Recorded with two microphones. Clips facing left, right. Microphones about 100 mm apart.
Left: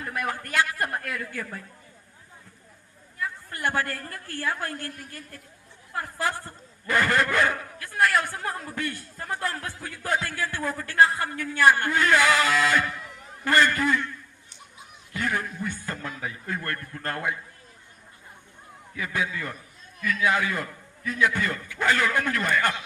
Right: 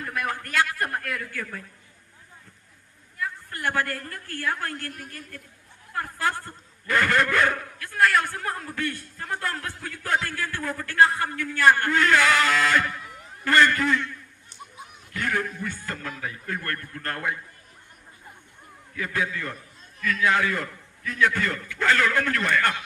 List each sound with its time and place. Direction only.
0.0 s a man's voice: 25° left (ahead or behind)
3.6 s a man's voice: 25° left (ahead or behind)
5.9 s a man's voice: 20° left (ahead or behind)
15.1 s a man's voice: 20° left (ahead or behind)
18.9 s a man's voice: 20° left (ahead or behind)